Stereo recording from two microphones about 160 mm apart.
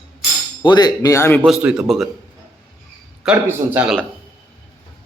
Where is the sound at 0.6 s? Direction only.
25° left (ahead or behind).